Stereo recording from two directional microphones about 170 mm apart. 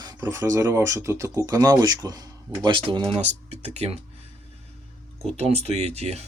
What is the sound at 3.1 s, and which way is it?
Speech, 40° right (ahead or behind).